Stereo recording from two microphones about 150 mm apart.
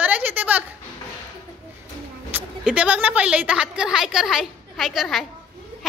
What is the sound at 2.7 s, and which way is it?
A woman's voice, 10° right (ahead or behind).